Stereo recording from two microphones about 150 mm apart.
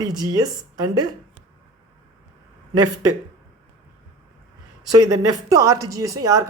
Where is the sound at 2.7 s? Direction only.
25° right (ahead or behind).